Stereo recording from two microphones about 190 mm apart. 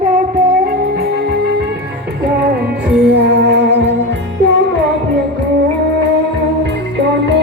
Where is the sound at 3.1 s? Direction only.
70° right (ahead or behind).